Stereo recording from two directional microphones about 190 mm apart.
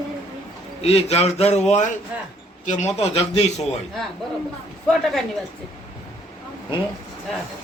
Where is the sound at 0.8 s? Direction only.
30° left (ahead or behind).